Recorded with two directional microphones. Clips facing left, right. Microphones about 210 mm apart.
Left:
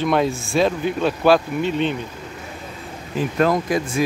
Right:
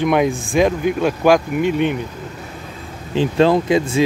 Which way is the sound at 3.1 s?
30° right (ahead or behind).